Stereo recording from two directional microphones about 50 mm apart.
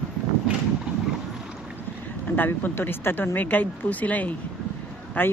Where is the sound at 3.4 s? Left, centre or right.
Left.